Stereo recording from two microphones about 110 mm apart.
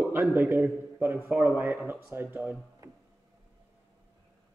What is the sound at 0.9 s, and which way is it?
Speech, 20° right (ahead or behind).